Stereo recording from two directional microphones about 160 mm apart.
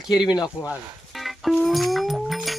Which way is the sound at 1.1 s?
Centre (ahead or behind).